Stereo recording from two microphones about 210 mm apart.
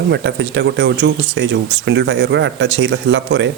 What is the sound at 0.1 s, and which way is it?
Speech, 55° right (ahead or behind).